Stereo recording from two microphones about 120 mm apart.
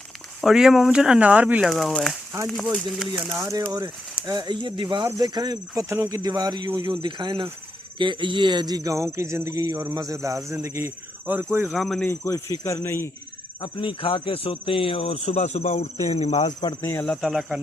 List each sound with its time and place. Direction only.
0.4 s speech: 5° right (ahead or behind)
1.7 s speech: centre (ahead or behind)
3.3 s speech: 25° right (ahead or behind); by 5.0 s 40° right (ahead or behind)
5.0 s speech: 30° right (ahead or behind)
11.7 s speech: centre (ahead or behind)
12.0 s speech: 25° left (ahead or behind)
13.6 s speech: 45° left (ahead or behind); by 16.3 s 65° left (ahead or behind)
16.6 s speech: 35° left (ahead or behind)
17.1 s speech: centre (ahead or behind)